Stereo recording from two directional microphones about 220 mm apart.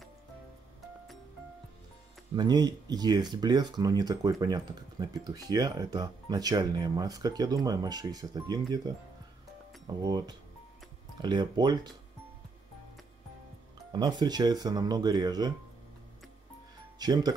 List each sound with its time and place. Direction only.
2.3 s speech: 20° right (ahead or behind)
10.0 s speech: 20° right (ahead or behind)
13.9 s speech: 20° right (ahead or behind)
17.0 s speech: 20° right (ahead or behind)